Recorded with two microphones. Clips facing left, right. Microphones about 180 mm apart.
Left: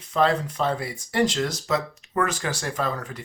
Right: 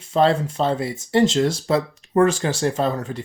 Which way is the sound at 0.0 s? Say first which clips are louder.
Right 4 dB; 30° right (ahead or behind).